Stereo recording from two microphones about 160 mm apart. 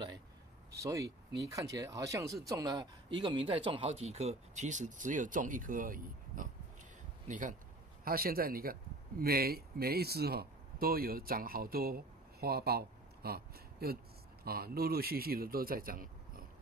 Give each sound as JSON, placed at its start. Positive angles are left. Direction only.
{"t": 0.7, "sound": "speech", "side_deg": -20}
{"t": 8.0, "sound": "a man's voice", "side_deg": -70}